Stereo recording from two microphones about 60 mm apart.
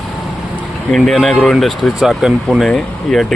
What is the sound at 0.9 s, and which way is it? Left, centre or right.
Speech, centre.